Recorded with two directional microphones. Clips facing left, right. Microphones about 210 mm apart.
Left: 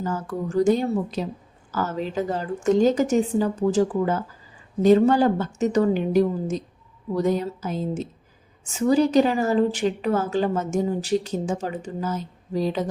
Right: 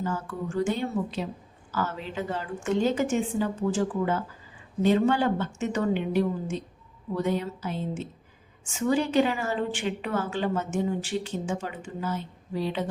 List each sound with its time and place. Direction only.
0.0 s a woman's voice: 40° left (ahead or behind)